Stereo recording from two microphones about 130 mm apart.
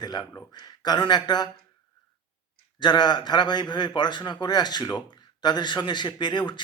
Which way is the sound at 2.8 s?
35° left (ahead or behind).